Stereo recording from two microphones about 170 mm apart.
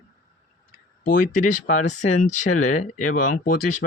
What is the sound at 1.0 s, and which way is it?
Speech, 55° left (ahead or behind).